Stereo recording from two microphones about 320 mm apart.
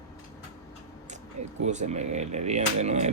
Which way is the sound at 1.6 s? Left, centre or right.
Right.